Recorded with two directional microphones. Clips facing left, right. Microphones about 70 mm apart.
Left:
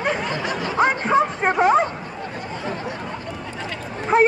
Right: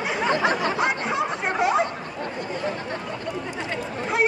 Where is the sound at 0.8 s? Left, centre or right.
Left.